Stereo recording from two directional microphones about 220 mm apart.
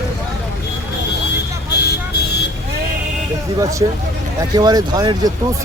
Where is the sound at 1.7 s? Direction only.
45° left (ahead or behind).